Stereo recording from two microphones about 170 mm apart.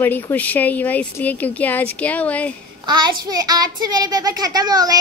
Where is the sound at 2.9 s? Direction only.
25° right (ahead or behind).